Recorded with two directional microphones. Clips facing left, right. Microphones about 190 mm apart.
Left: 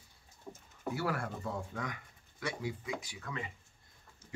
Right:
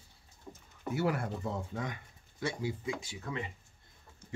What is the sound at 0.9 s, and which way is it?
Speech, 20° right (ahead or behind).